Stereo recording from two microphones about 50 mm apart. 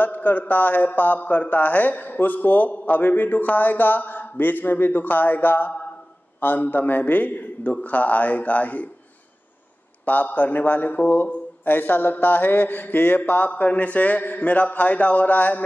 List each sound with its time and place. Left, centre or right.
0.0 s speech: left
10.0 s speech: left